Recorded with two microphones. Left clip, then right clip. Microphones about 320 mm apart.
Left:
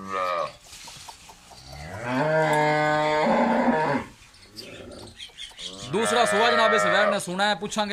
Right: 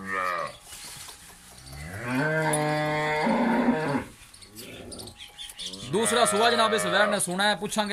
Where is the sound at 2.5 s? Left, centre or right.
Left.